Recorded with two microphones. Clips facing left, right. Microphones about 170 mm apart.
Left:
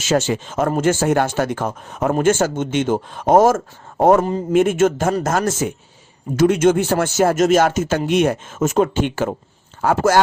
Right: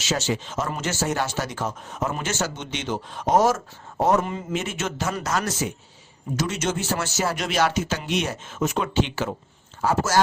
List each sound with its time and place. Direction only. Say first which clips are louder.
0.0 s speech: left 7 dB; 50° left (ahead or behind)
4.2 s speech: left 8 dB; 35° left (ahead or behind)
4.5 s speech: left 15 dB; 50° left (ahead or behind)